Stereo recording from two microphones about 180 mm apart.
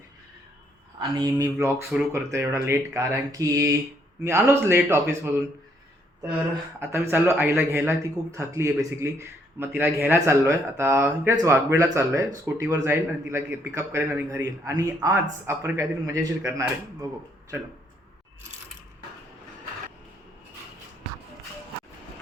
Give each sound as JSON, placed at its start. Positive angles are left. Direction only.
{"t": 0.9, "sound": "a man's voice", "side_deg": -25}
{"t": 6.7, "sound": "a man's voice", "side_deg": -10}